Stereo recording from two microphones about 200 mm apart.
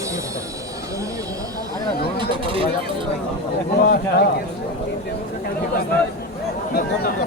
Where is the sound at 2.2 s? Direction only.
25° right (ahead or behind).